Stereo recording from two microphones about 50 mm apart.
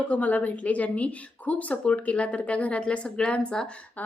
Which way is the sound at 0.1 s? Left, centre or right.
Left.